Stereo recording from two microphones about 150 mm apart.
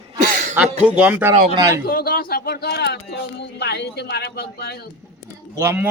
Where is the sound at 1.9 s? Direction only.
85° left.